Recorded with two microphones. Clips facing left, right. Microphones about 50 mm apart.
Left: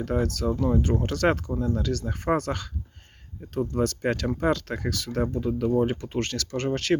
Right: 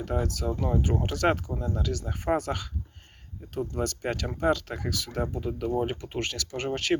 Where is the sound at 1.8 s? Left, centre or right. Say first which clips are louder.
Left 3 dB; centre.